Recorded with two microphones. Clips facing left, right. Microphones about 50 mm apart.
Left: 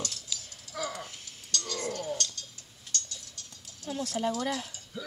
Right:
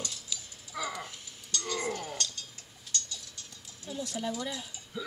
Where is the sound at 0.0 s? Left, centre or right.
Centre.